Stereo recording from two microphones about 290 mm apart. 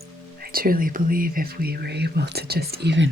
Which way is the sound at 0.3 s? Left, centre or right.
Right.